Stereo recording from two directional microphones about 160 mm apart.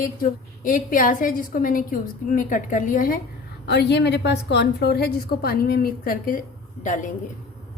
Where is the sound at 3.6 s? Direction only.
90° left; by 7.1 s 50° left (ahead or behind).